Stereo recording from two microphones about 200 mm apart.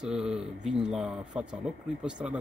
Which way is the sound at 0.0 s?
5° right (ahead or behind).